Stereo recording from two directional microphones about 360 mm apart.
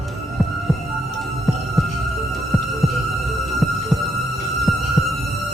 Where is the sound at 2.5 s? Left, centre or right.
Centre.